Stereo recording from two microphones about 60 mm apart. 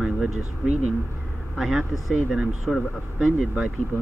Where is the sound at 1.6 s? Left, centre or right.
Centre.